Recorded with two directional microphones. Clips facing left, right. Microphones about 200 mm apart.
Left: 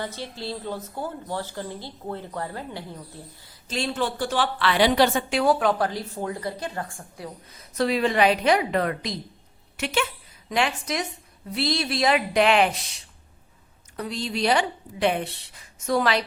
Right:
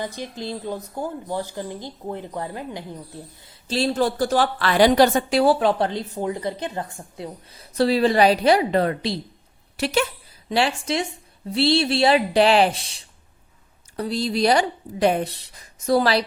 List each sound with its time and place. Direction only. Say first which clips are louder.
0.0 s speech: right 3 dB; 15° right (ahead or behind)
3.8 s a woman's voice: right 6 dB; 35° right (ahead or behind)